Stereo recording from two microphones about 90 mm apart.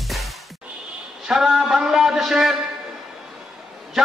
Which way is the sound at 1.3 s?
5° right (ahead or behind).